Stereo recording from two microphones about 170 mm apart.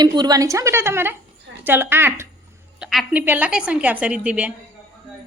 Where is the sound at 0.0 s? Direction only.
25° right (ahead or behind).